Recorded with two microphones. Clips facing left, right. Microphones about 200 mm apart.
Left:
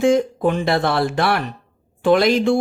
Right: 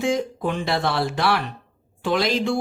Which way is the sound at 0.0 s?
50° left (ahead or behind).